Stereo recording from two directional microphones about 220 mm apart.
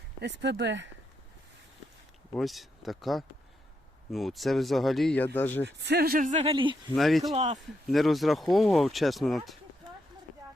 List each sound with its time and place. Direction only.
0.2 s speech: 50° right (ahead or behind)
2.3 s speech: centre (ahead or behind)
5.6 s speech: 50° right (ahead or behind); by 6.9 s 20° right (ahead or behind)
6.9 s speech: centre (ahead or behind)
7.3 s speech: 30° right (ahead or behind)
7.9 s speech: centre (ahead or behind)